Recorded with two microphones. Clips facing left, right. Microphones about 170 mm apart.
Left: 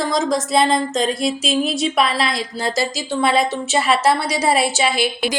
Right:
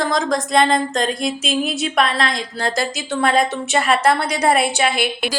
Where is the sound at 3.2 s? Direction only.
45° right (ahead or behind).